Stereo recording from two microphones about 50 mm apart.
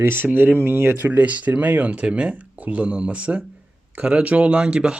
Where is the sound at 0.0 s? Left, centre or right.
Right.